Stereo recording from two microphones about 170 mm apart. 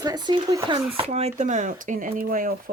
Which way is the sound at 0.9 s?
40° right (ahead or behind).